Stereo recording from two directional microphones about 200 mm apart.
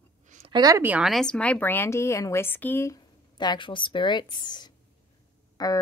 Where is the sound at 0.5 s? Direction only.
15° right (ahead or behind).